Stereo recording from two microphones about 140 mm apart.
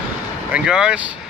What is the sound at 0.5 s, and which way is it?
Speech, 5° right (ahead or behind).